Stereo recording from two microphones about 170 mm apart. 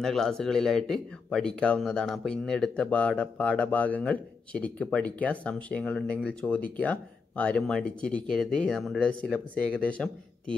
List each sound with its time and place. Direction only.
0.0 s speech: centre (ahead or behind)